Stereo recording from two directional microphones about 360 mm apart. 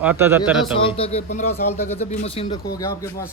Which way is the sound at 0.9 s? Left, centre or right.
Centre.